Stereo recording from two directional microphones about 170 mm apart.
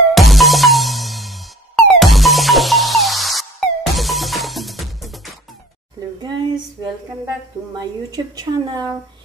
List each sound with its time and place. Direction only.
0.1 s music: centre (ahead or behind)
6.2 s female singing: 25° right (ahead or behind)
7.7 s a woman's voice: 20° right (ahead or behind)